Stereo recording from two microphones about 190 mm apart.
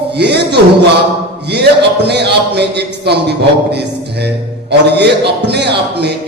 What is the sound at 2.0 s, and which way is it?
A man's voice, 60° right (ahead or behind).